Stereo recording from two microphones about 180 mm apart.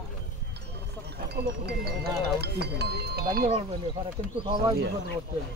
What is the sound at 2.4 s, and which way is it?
Speech, 65° right (ahead or behind).